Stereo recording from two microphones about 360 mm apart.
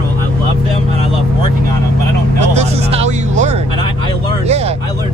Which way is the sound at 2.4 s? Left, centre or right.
Centre.